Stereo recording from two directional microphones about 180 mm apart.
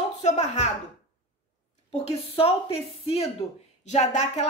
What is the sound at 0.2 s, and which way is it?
Speech, 40° left (ahead or behind).